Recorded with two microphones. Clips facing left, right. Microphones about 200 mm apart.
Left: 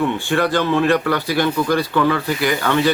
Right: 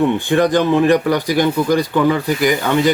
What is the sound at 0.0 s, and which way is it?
Speech, 20° right (ahead or behind).